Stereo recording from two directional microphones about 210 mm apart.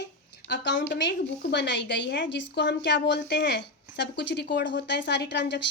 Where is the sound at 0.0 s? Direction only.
55° left (ahead or behind).